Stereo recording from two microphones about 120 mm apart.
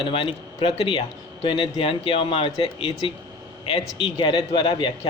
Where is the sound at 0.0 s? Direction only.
45° left (ahead or behind).